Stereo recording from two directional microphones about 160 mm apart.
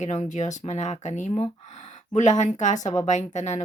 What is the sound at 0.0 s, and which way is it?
Speech, 45° left (ahead or behind).